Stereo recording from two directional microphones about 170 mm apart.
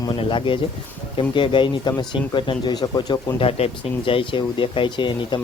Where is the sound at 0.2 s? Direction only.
30° left (ahead or behind).